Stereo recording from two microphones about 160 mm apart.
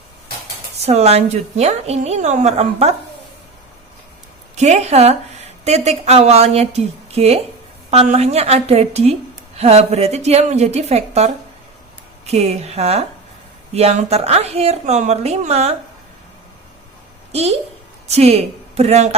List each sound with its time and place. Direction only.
0.9 s a woman's voice: 40° right (ahead or behind)
4.5 s a woman's voice: 45° right (ahead or behind)
18.1 s a woman's voice: 40° right (ahead or behind)